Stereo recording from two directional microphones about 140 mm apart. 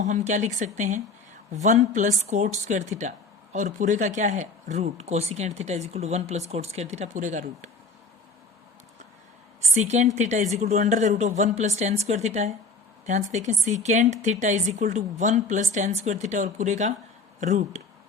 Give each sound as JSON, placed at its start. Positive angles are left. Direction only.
{"t": 0.0, "sound": "a woman's voice", "side_deg": -60}
{"t": 9.6, "sound": "a woman's voice", "side_deg": -55}